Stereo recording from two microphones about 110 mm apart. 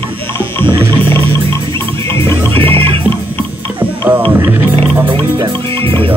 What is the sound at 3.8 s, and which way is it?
Music, 15° right (ahead or behind).